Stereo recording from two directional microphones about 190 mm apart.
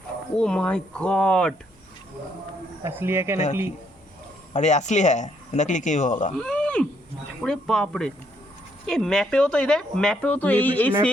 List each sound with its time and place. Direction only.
0.3 s speech: 5° left (ahead or behind)
2.8 s speech: 15° right (ahead or behind)
4.5 s speech: 40° left (ahead or behind)
6.4 s a sound: 5° left (ahead or behind)
7.4 s speech: 5° left (ahead or behind)